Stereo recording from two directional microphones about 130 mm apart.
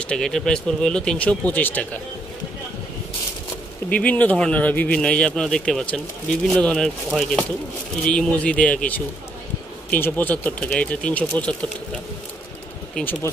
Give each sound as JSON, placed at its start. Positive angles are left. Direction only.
{"t": 0.0, "sound": "speech", "side_deg": 5}
{"t": 3.9, "sound": "speech", "side_deg": 10}
{"t": 12.9, "sound": "speech", "side_deg": 15}